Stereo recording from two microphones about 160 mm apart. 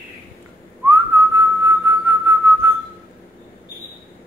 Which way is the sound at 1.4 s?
15° right (ahead or behind).